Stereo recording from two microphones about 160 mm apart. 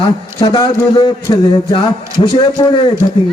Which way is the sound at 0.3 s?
25° left (ahead or behind).